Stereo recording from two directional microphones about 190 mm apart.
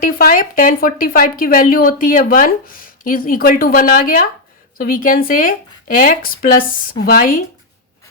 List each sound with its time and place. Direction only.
0.0 s speech: 50° left (ahead or behind)